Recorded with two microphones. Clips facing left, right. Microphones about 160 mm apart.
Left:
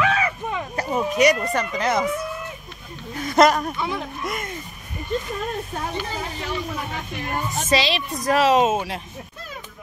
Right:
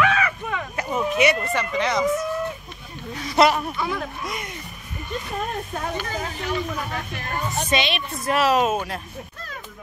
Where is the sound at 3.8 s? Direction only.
20° left (ahead or behind).